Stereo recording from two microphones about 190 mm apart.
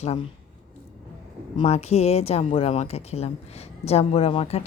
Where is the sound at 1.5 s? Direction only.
35° left (ahead or behind).